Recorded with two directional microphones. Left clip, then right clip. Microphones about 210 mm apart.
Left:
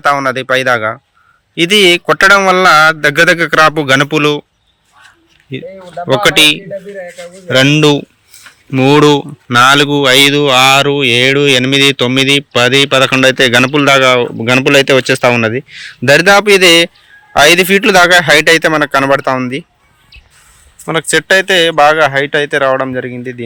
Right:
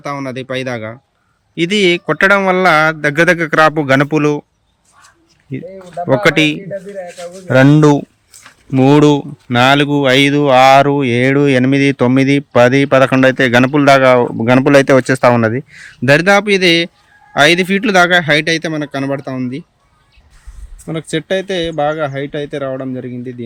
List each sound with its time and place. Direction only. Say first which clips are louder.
0.0 s speech: left 11 dB; 5° right (ahead or behind); by 4.4 s 20° right (ahead or behind)
5.5 s speech: left 2 dB; 15° right (ahead or behind)
20.8 s speech: left 9 dB; centre (ahead or behind)